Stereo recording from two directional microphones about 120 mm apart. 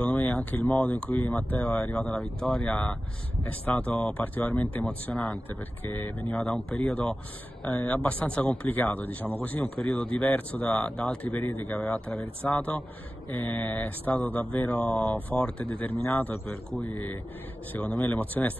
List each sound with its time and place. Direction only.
0.0 s speech: 15° left (ahead or behind)